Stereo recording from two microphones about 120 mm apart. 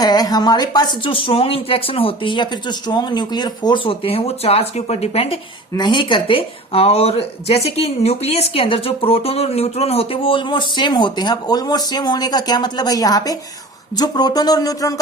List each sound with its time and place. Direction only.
0.0 s speech: 35° left (ahead or behind); by 5.4 s 55° left (ahead or behind)
5.7 s speech: 40° left (ahead or behind)